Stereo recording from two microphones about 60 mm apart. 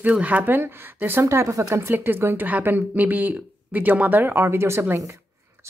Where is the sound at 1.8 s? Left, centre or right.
Right.